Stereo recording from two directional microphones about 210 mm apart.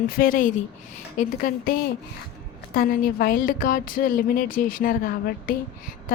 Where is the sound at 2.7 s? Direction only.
40° left (ahead or behind).